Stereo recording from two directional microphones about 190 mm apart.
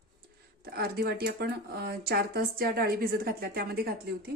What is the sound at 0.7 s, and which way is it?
Speech, 55° right (ahead or behind).